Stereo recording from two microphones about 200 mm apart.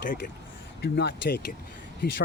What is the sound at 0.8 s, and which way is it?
Speech, 55° left (ahead or behind).